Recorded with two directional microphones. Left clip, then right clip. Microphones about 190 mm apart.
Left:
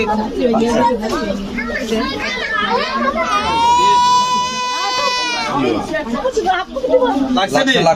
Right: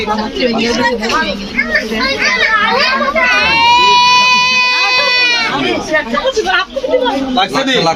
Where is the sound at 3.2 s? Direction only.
25° left (ahead or behind).